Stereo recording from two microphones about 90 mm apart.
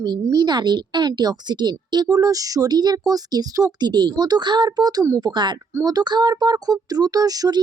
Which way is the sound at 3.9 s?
55° right (ahead or behind).